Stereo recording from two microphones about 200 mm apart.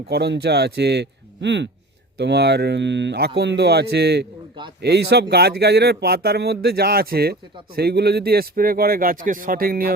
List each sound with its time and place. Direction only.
0.1 s a man's voice: 55° right (ahead or behind)